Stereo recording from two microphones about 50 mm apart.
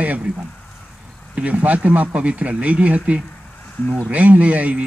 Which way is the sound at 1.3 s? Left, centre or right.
Right.